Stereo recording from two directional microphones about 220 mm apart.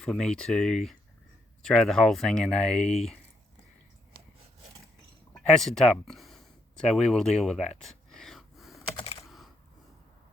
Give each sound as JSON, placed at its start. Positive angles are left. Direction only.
{"t": 0.0, "sound": "speech", "side_deg": 5}
{"t": 2.8, "sound": "speech", "side_deg": 30}
{"t": 5.3, "sound": "speech", "side_deg": 0}
{"t": 7.8, "sound": "a sound", "side_deg": 0}